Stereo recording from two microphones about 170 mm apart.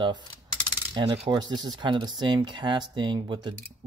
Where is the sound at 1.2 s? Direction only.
25° right (ahead or behind).